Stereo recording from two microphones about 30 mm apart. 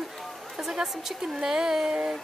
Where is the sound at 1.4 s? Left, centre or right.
Centre.